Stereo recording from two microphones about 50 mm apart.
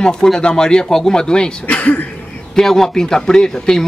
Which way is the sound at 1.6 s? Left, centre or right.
Left.